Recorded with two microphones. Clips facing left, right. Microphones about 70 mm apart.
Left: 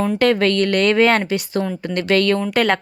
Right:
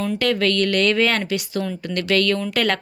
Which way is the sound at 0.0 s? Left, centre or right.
Left.